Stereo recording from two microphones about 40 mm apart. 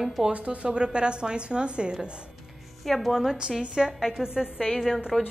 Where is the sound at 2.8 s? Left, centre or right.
Centre.